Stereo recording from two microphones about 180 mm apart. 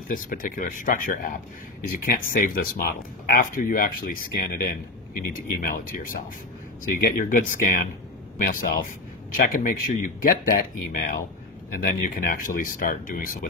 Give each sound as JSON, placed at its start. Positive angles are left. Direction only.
{"t": 0.1, "sound": "speech", "side_deg": 50}